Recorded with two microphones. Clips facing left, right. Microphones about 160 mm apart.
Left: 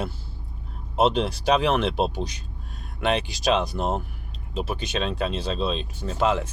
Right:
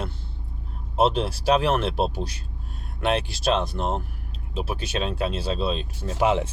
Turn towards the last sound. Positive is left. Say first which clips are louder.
# right 1 dB
turn(degrees=-20)  # may be behind; listen again after turning